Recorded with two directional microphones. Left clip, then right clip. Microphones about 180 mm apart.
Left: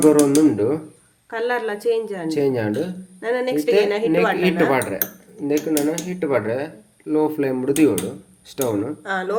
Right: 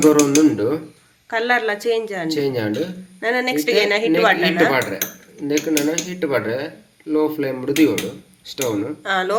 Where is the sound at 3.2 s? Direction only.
5° right (ahead or behind).